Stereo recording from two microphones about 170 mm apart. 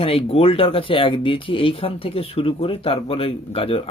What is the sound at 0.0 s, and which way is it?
Speech, 35° left (ahead or behind).